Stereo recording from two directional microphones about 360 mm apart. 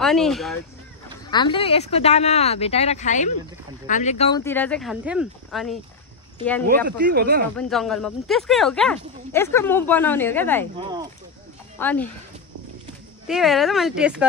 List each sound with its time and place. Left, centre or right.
0.0 s speech: centre
1.3 s speech: centre
7.0 s speech: right
7.5 s speech: centre
10.8 s speech: centre
11.8 s speech: centre
13.3 s speech: centre